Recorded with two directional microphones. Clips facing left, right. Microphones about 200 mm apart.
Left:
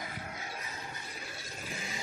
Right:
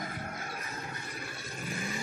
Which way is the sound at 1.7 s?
55° right (ahead or behind).